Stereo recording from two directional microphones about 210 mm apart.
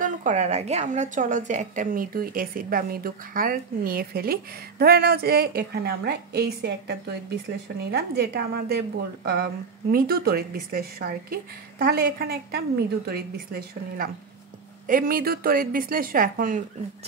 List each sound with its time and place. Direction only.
0.0 s a woman's voice: 35° right (ahead or behind)